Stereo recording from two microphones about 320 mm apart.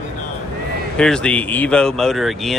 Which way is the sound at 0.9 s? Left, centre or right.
Centre.